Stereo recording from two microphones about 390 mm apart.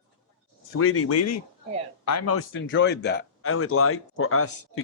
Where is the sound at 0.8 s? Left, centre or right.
Left.